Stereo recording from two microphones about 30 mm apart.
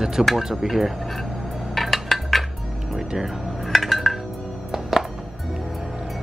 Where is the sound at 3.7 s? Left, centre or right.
Centre.